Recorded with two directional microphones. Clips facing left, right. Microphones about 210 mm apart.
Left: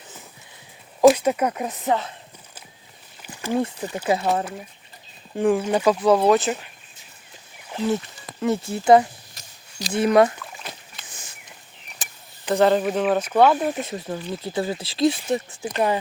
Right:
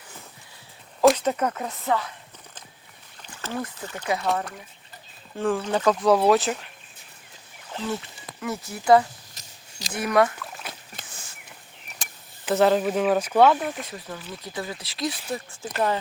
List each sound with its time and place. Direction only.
1.0 s speech: 10° left (ahead or behind)
3.2 s rowboat: 10° left (ahead or behind)
3.6 s speech: 20° left (ahead or behind)
5.4 s speech: 15° left (ahead or behind)
7.7 s speech: 15° left (ahead or behind)
10.4 s rowboat: centre (ahead or behind)
11.1 s a sound: 20° left (ahead or behind)
12.0 s a sound: centre (ahead or behind)
12.5 s speech: 5° right (ahead or behind)
13.4 s speech: 10° left (ahead or behind)
13.7 s speech: 25° left (ahead or behind)